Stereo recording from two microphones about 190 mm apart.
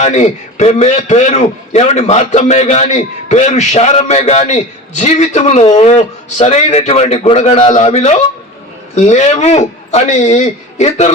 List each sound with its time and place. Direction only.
0.0 s a man's voice: 35° left (ahead or behind)